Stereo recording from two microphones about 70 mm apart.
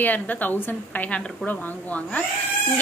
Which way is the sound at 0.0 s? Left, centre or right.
Left.